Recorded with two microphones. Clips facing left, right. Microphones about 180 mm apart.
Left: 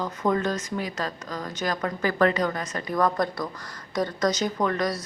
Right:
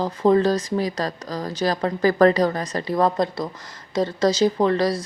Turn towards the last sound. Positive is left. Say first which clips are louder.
# right 6 dB
turn(degrees=-30)  # may be behind; listen again after turning